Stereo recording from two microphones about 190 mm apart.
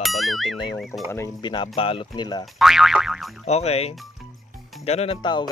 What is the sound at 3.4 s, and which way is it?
Speech, 35° left (ahead or behind).